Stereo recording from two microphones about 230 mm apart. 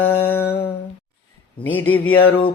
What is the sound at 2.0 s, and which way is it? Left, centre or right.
Speech, left.